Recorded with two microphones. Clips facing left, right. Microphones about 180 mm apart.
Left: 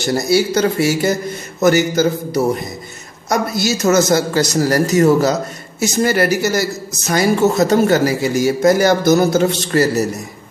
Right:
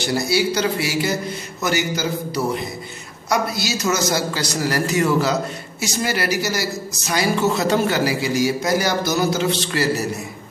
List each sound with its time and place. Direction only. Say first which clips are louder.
0.0 s a man's voice: left 4 dB; 45° left (ahead or behind)